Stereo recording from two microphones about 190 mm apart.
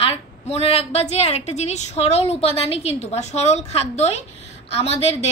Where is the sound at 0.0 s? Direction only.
30° left (ahead or behind).